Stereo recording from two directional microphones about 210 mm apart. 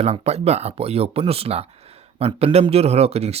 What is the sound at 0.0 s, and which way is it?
Speech, 30° right (ahead or behind).